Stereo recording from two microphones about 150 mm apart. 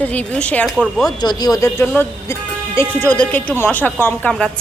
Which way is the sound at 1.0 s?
25° left (ahead or behind).